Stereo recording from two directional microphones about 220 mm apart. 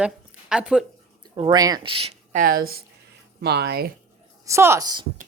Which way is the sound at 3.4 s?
45° right (ahead or behind).